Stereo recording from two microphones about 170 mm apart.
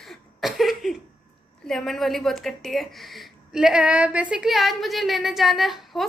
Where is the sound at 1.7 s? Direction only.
Centre (ahead or behind).